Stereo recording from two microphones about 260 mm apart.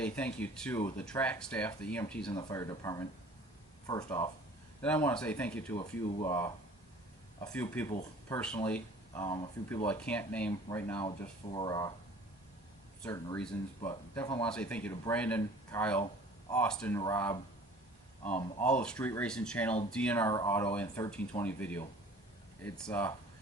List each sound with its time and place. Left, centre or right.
0.3 s speech: centre
2.3 s speech: centre
5.7 s speech: centre
7.5 s speech: centre
13.1 s speech: centre